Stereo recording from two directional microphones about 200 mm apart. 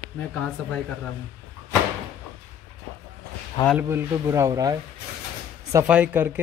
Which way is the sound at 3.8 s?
10° right (ahead or behind).